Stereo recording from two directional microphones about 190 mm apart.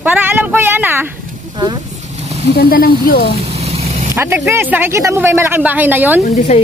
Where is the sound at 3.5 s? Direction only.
35° right (ahead or behind).